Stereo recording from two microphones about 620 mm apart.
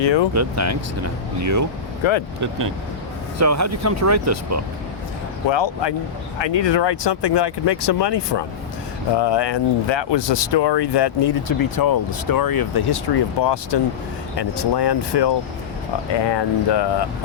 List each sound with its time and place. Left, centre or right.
0.0 s speech: left
0.3 s speech: right
2.0 s speech: left
3.3 s speech: right
5.5 s speech: left